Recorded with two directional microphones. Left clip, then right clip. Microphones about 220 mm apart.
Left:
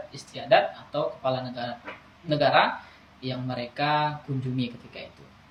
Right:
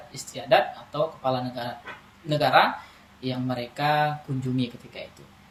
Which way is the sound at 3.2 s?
25° right (ahead or behind).